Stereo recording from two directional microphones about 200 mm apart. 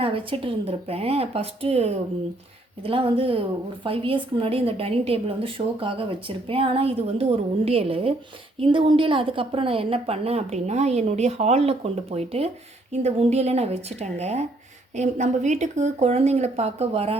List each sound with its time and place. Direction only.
0.0 s a woman's voice: 25° right (ahead or behind)